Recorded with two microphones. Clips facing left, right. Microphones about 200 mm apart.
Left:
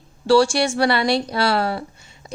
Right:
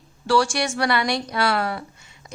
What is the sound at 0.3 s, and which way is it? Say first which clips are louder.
A woman's voice: left 5 dB; 30° left (ahead or behind).